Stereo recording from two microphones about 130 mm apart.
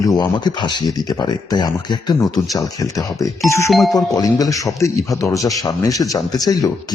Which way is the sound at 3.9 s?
25° left (ahead or behind).